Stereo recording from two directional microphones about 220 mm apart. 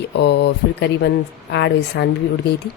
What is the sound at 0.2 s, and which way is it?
Speech, 50° left (ahead or behind).